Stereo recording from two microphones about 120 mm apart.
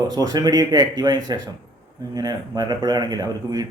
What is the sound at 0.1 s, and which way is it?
A man's voice, 35° right (ahead or behind).